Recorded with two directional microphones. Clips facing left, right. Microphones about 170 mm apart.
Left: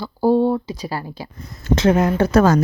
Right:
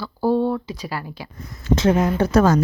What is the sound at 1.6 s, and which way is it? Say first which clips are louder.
Speech: left 2 dB; 70° left (ahead or behind).